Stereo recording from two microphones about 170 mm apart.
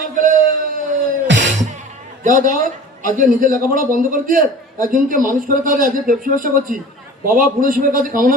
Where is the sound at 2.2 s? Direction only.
50° right (ahead or behind).